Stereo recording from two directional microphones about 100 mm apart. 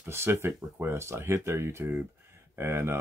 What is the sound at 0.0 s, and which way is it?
Snicker, 25° right (ahead or behind).